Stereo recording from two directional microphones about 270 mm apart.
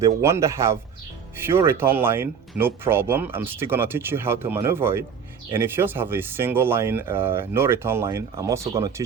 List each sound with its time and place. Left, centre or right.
0.0 s speech: centre
8.6 s speech: right